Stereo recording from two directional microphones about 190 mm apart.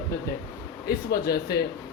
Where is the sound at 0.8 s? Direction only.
55° left (ahead or behind).